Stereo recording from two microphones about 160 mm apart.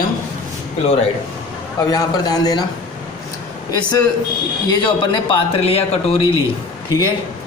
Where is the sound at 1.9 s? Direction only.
25° left (ahead or behind).